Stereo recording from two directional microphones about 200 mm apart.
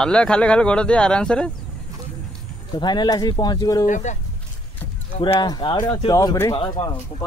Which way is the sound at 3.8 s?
40° left (ahead or behind).